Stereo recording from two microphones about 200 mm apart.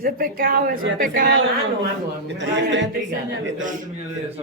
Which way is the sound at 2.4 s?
60° right (ahead or behind).